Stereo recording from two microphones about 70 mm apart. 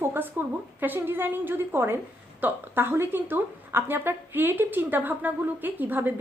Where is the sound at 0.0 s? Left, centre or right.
Right.